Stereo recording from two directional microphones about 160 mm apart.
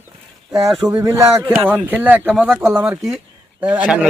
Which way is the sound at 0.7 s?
Centre (ahead or behind).